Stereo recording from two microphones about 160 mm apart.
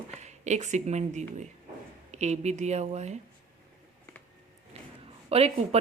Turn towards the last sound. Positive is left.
turn(degrees=-40)  # may be behind; listen again after turning